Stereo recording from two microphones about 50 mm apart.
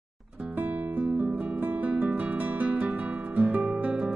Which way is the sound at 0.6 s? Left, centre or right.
Right.